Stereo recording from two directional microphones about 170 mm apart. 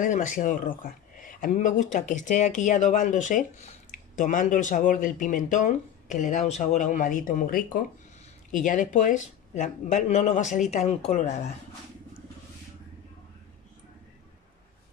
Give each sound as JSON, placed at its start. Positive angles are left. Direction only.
{"t": 0.0, "sound": "speech", "side_deg": 50}